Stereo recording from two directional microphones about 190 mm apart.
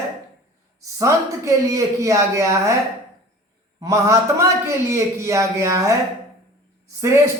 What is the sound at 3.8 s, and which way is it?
Speech, 15° right (ahead or behind).